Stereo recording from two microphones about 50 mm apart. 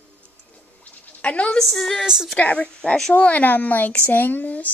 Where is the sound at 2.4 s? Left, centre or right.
Left.